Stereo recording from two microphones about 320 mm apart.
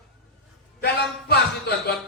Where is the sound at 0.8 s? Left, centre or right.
Left.